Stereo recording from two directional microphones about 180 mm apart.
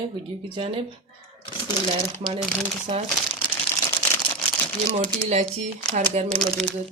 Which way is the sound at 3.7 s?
20° left (ahead or behind).